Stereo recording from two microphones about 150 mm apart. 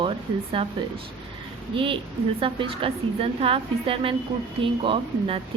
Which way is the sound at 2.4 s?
35° right (ahead or behind).